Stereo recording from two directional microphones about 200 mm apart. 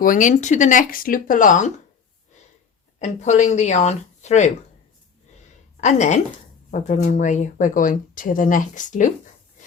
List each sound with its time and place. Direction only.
0.0 s speech: 40° left (ahead or behind)
3.0 s speech: 35° left (ahead or behind)
5.8 s speech: 35° left (ahead or behind)